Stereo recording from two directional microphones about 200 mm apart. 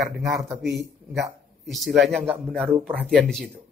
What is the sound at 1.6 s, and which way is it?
Speech, centre (ahead or behind).